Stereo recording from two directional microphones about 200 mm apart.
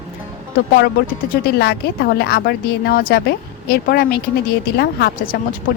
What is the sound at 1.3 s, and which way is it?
Speech, 55° left (ahead or behind).